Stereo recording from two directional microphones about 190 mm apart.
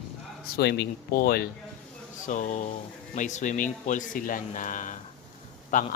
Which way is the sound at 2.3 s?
40° left (ahead or behind).